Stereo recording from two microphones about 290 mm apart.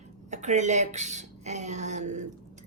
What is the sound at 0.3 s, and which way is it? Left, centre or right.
Speech, right.